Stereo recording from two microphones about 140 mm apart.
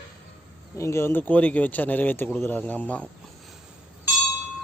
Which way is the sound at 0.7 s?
20° left (ahead or behind).